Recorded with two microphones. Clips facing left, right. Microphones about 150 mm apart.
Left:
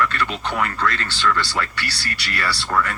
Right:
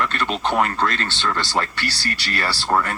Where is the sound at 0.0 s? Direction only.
25° right (ahead or behind).